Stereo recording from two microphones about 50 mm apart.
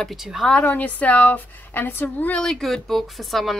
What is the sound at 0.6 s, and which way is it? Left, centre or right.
Speech, left.